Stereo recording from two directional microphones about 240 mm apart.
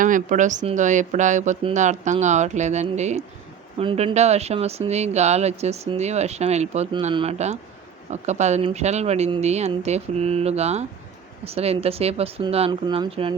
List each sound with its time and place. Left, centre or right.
0.0 s speech: right